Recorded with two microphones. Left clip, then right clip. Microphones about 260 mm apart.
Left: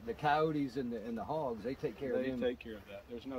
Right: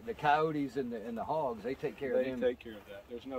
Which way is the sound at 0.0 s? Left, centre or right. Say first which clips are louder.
Right 3 dB; centre.